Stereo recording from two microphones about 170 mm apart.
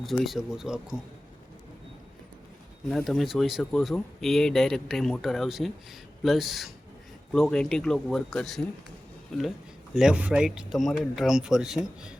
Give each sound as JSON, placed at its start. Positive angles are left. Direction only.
{"t": 0.0, "sound": "speech", "side_deg": 0}
{"t": 2.9, "sound": "speech", "side_deg": 0}